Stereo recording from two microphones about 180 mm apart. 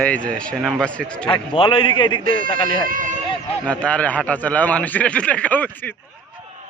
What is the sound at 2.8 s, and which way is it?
Speech, 45° right (ahead or behind).